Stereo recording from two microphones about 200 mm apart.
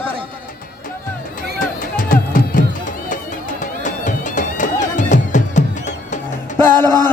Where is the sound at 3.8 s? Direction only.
40° left (ahead or behind).